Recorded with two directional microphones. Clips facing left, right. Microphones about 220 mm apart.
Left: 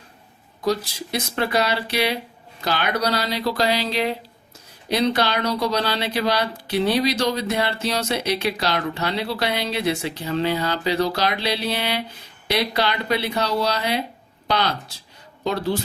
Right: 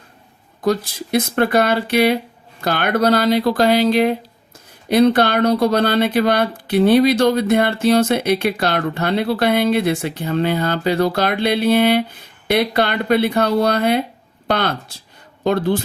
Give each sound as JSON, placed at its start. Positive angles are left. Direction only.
{"t": 0.6, "sound": "speech", "side_deg": -50}